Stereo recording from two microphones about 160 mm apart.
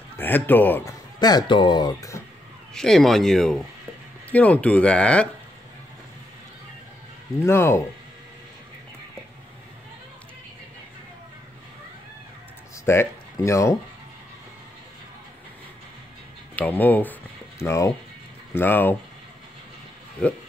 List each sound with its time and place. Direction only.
0.2 s speech: 10° left (ahead or behind)
1.2 s speech: 25° left (ahead or behind)
2.7 s speech: centre (ahead or behind)
7.4 s speech: 15° left (ahead or behind)
12.8 s speech: 15° left (ahead or behind)
16.5 s speech: 10° left (ahead or behind)